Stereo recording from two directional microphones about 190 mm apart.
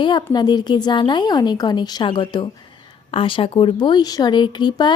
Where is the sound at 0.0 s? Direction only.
25° left (ahead or behind).